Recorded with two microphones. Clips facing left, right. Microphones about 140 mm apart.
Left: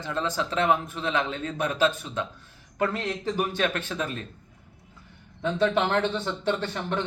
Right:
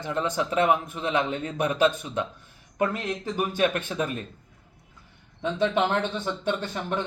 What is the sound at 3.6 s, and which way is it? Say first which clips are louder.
Speech: right 3 dB; 15° right (ahead or behind).